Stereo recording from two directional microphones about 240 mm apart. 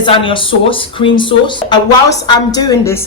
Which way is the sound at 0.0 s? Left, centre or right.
Left.